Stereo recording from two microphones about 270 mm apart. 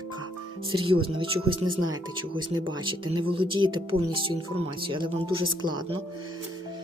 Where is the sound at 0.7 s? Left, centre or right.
Centre.